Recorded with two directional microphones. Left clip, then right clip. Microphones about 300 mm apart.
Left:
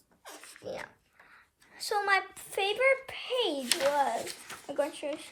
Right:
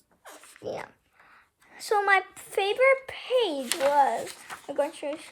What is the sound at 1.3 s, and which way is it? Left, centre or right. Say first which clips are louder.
A woman's voice: right 4 dB; right.